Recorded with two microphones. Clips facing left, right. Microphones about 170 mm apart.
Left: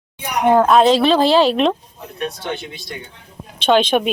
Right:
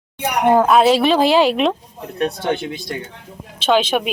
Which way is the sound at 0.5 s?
Centre (ahead or behind).